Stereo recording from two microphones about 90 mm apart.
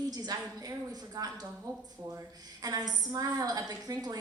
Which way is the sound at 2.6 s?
45° right (ahead or behind).